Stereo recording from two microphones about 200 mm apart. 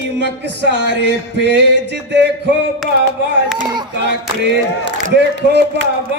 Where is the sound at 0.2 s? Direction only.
60° right (ahead or behind).